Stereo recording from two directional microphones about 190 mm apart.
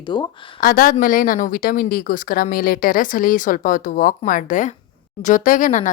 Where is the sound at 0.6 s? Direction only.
50° left (ahead or behind).